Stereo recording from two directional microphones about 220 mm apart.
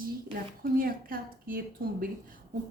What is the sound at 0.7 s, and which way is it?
A woman's voice, 40° right (ahead or behind).